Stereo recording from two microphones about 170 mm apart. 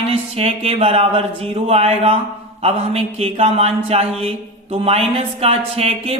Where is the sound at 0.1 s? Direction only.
35° right (ahead or behind).